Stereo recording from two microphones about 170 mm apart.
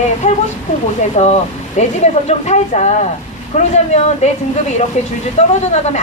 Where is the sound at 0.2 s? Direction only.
45° left (ahead or behind).